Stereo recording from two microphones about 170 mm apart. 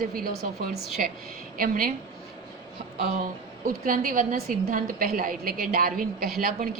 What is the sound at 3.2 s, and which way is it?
A woman's voice, 55° right (ahead or behind).